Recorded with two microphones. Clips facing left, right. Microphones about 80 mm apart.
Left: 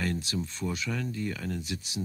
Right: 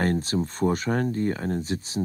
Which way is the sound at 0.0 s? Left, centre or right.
Right.